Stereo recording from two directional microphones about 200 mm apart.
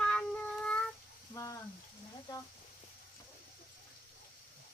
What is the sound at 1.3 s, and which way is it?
Frying, 15° left (ahead or behind).